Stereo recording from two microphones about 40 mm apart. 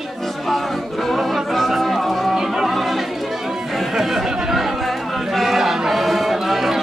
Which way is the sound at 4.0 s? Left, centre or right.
Centre.